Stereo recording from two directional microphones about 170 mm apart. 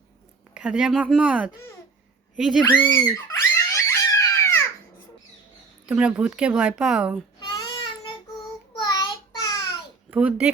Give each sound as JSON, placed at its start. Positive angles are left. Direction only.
{"t": 0.5, "sound": "speech", "side_deg": -5}
{"t": 3.2, "sound": "crying", "side_deg": 15}
{"t": 5.8, "sound": "speech", "side_deg": -5}
{"t": 7.3, "sound": "child singing", "side_deg": 25}
{"t": 10.1, "sound": "speech", "side_deg": -5}